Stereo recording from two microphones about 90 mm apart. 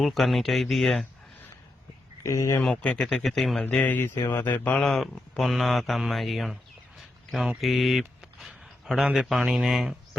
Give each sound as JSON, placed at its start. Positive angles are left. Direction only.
{"t": 0.0, "sound": "speech", "side_deg": 0}
{"t": 2.2, "sound": "speech", "side_deg": 35}
{"t": 2.6, "sound": "speech", "side_deg": 10}
{"t": 3.8, "sound": "speech", "side_deg": 25}
{"t": 4.4, "sound": "speech", "side_deg": 20}
{"t": 4.8, "sound": "speech", "side_deg": 5}